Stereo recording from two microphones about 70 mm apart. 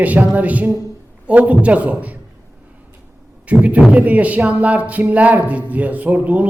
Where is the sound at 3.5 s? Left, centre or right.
Right.